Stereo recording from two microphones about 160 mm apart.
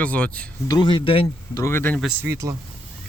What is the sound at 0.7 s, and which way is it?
Speech, 30° left (ahead or behind).